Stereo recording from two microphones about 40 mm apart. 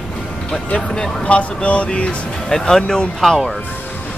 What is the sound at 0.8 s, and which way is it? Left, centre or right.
Speech, centre.